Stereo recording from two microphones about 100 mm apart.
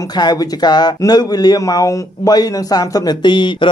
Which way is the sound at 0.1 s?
45° left (ahead or behind).